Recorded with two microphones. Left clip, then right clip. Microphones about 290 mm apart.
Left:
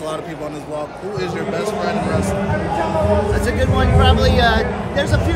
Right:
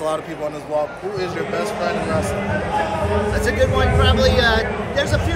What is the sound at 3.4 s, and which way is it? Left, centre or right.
Speech, centre.